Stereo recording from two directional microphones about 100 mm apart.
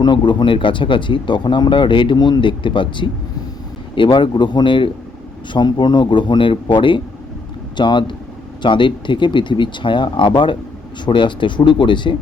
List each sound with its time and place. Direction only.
0.0 s speech: 50° left (ahead or behind)